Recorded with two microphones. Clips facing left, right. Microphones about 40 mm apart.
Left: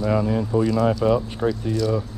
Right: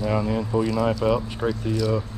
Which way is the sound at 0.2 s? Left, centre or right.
Centre.